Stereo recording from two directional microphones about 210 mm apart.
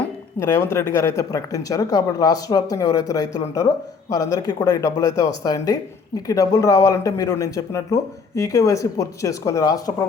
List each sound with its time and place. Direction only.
0.3 s speech: 10° left (ahead or behind)